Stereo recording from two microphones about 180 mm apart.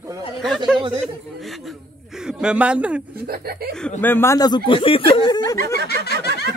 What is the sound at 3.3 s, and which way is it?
Speech, 60° right (ahead or behind).